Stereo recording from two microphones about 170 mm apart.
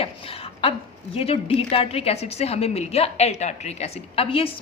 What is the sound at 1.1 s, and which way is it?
A woman's voice, 35° left (ahead or behind).